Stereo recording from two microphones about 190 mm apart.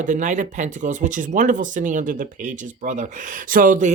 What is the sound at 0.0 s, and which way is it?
Speech, 40° right (ahead or behind).